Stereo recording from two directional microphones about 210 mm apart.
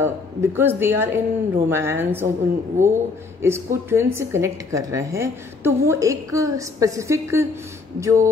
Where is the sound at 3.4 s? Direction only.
10° right (ahead or behind).